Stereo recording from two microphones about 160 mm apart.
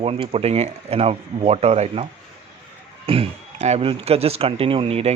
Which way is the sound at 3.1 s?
40° right (ahead or behind).